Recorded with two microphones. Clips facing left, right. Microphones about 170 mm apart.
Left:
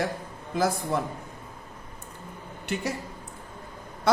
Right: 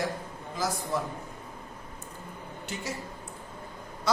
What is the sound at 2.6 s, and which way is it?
Speech, 65° left (ahead or behind).